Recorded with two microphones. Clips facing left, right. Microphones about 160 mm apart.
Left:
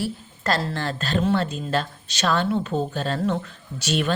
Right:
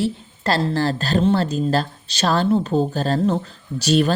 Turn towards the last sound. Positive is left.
turn(degrees=-35)  # may be behind; listen again after turning